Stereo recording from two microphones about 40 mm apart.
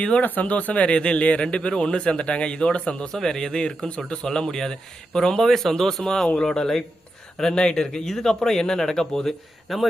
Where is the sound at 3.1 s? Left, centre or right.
Centre.